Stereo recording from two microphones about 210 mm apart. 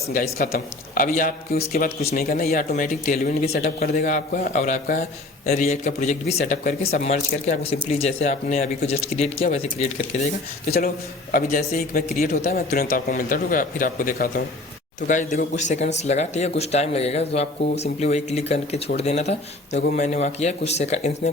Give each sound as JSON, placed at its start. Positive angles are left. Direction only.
{"t": 0.1, "sound": "speech", "side_deg": 40}
{"t": 10.8, "sound": "speech", "side_deg": 45}